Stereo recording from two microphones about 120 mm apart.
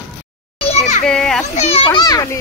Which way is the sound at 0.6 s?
65° left (ahead or behind).